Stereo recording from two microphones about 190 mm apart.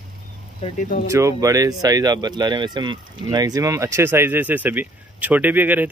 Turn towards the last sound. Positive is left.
turn(degrees=-10)  # may be behind; listen again after turning